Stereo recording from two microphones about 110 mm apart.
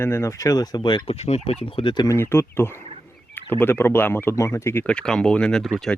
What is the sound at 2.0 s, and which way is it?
Speech, 25° left (ahead or behind).